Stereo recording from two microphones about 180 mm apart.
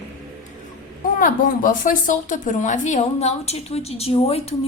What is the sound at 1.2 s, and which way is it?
A woman's voice, 50° left (ahead or behind).